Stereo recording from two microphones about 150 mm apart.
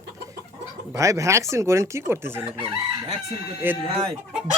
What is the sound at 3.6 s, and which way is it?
Speech, 15° right (ahead or behind).